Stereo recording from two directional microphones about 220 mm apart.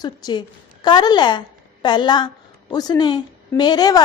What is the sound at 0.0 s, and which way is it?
A woman's voice, 20° left (ahead or behind).